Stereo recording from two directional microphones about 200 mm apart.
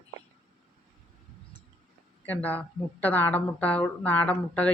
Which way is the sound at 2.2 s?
10° left (ahead or behind).